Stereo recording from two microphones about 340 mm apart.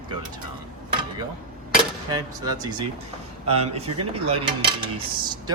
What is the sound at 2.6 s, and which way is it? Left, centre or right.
Speech, centre.